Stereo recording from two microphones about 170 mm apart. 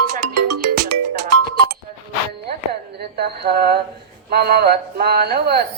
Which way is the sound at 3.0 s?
70° right (ahead or behind).